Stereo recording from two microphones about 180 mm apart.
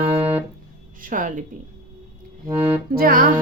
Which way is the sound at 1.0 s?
45° right (ahead or behind).